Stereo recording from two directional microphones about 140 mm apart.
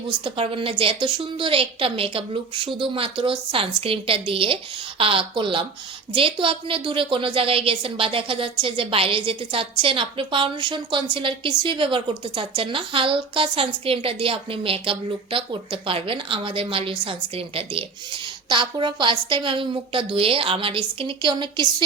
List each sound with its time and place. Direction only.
0.3 s a woman's voice: 40° right (ahead or behind)